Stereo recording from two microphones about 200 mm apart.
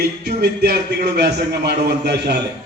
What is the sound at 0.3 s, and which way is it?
A man's voice, 55° right (ahead or behind).